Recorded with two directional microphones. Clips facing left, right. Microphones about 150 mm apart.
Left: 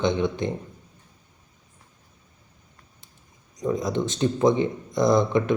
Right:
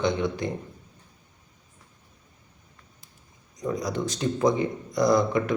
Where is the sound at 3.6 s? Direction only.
20° left (ahead or behind).